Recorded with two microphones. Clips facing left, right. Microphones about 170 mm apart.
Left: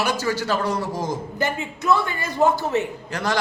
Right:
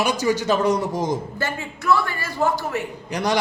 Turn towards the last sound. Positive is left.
turn(degrees=-15)  # may be behind; listen again after turning